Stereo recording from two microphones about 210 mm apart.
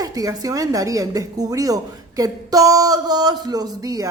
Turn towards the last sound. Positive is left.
turn(degrees=-15)  # may be behind; listen again after turning